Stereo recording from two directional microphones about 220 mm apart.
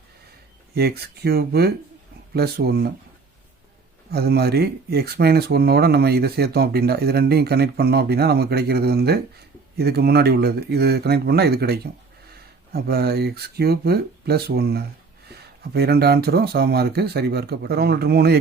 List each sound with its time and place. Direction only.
0.7 s speech: 45° right (ahead or behind)
4.1 s speech: 45° right (ahead or behind)